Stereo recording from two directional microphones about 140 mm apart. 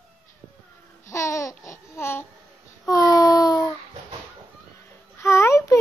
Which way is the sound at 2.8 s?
25° left (ahead or behind).